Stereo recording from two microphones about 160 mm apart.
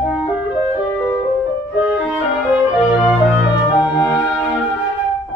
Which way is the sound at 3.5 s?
30° left (ahead or behind).